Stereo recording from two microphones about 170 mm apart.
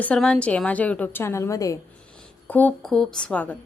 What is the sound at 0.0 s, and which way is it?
A woman's voice, 5° left (ahead or behind).